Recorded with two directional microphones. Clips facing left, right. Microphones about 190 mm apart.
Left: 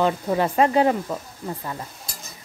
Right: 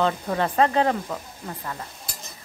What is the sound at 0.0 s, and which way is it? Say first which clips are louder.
Stir: left 2 dB; 15° left (ahead or behind).